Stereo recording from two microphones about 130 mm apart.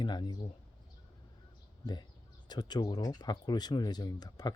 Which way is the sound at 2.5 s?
30° left (ahead or behind).